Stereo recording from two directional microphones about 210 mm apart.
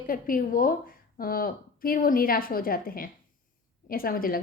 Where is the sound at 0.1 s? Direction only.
40° left (ahead or behind).